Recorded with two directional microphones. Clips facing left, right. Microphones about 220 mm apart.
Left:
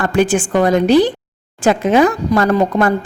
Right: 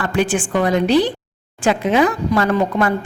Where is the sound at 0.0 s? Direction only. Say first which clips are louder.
Left 4 dB; 45° left (ahead or behind).